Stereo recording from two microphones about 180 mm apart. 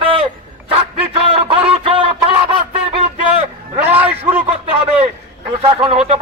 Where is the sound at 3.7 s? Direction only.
10° right (ahead or behind).